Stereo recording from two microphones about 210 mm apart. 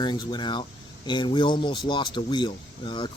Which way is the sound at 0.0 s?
20° left (ahead or behind).